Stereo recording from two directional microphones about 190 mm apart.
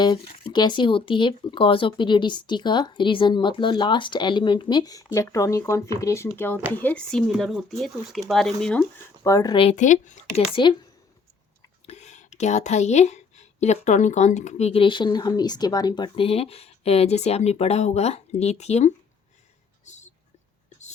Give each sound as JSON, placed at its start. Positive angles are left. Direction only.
{"t": 0.0, "sound": "speech", "side_deg": 20}
{"t": 9.2, "sound": "speech", "side_deg": 15}
{"t": 9.7, "sound": "speech", "side_deg": 40}
{"t": 10.5, "sound": "speech", "side_deg": 25}
{"t": 11.9, "sound": "speech", "side_deg": 35}
{"t": 19.8, "sound": "a sound", "side_deg": 40}